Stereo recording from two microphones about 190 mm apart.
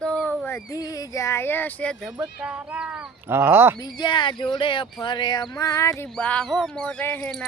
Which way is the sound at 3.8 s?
20° left (ahead or behind).